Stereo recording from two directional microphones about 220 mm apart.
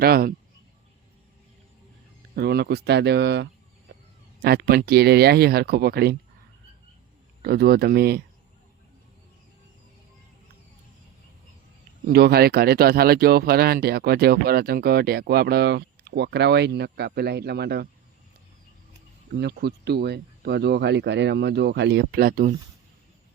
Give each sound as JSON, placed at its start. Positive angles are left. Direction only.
{"t": 0.0, "sound": "speech", "side_deg": -45}
{"t": 2.3, "sound": "speech", "side_deg": -45}
{"t": 7.4, "sound": "speech", "side_deg": -45}
{"t": 12.0, "sound": "speech", "side_deg": -45}
{"t": 19.3, "sound": "speech", "side_deg": -45}